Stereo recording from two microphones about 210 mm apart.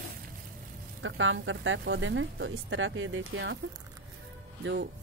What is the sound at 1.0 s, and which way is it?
Speech, 65° right (ahead or behind).